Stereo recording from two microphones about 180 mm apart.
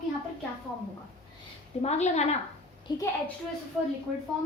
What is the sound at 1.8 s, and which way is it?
Speech, 40° left (ahead or behind).